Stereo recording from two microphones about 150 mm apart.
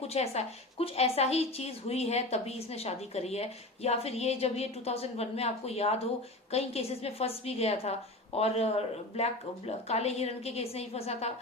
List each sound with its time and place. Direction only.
0.1 s a woman's voice: 45° left (ahead or behind)